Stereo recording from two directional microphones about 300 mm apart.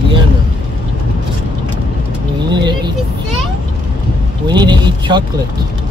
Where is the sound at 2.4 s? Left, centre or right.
Centre.